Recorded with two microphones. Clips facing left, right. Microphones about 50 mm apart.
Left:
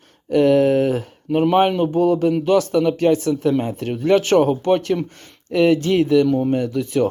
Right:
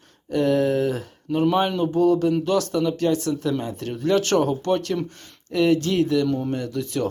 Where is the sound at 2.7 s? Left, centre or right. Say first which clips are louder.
Left 5 dB; left.